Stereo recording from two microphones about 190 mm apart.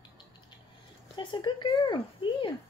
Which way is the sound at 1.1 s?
25° left (ahead or behind).